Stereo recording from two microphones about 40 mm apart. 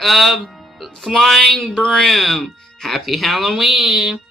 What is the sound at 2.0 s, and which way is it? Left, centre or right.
Speech, centre.